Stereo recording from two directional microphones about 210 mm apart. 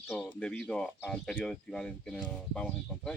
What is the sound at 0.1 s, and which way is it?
Speech, centre (ahead or behind).